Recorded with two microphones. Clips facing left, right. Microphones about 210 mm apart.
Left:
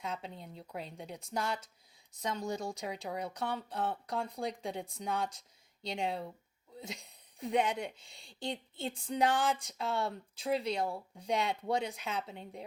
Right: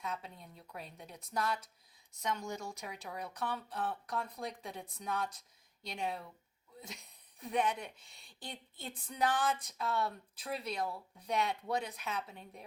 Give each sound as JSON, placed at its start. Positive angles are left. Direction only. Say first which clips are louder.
{"t": 0.0, "sound": "speech", "louder": "left 2 dB", "side_deg": 30}